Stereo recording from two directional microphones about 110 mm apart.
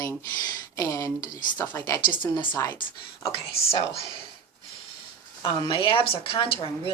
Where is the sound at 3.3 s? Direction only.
65° left (ahead or behind).